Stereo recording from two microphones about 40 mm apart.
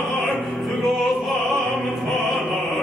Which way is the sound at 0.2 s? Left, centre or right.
Centre.